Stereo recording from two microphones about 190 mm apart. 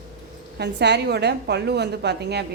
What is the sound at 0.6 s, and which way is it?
A woman's voice, 65° right (ahead or behind).